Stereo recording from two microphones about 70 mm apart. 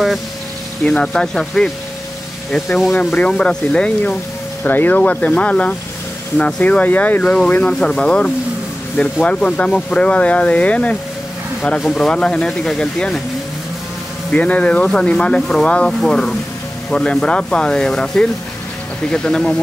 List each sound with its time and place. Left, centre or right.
0.8 s speech: centre
2.9 s speech: centre
4.6 s speech: left
11.8 s speech: centre
12.1 s speech: centre
14.3 s speech: centre